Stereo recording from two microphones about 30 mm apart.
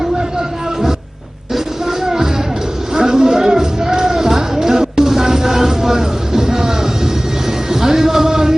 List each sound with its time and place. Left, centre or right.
1.5 s music: centre